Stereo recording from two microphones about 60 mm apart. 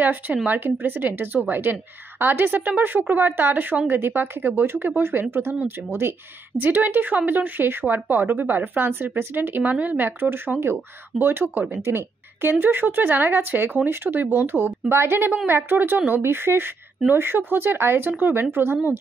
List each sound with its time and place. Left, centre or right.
0.0 s a woman's voice: right
6.6 s a woman's voice: right
11.8 s a woman's voice: right